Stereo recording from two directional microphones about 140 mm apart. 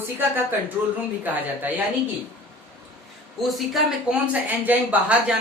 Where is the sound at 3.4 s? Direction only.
Centre (ahead or behind).